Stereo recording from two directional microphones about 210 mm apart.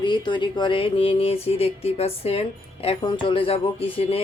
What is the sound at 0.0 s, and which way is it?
Speech, 20° left (ahead or behind).